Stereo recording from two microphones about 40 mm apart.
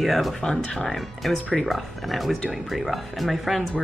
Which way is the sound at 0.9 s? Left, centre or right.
Centre.